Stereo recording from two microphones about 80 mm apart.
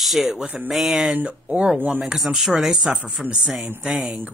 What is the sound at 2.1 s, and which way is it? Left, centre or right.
Speech, centre.